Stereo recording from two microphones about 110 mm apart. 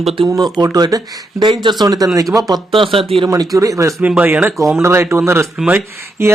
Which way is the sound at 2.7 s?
55° right (ahead or behind).